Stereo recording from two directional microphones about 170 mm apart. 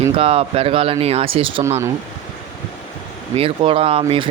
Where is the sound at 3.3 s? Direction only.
35° right (ahead or behind).